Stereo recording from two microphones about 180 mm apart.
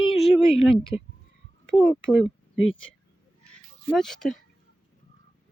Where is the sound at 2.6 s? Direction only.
90° left.